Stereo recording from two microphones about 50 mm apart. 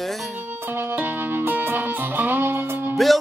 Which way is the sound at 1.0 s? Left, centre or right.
Right.